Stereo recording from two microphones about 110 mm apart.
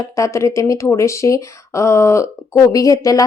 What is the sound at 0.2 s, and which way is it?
Speech, 25° left (ahead or behind).